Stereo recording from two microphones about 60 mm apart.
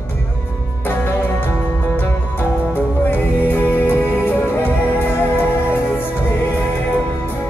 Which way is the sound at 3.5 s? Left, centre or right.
Left.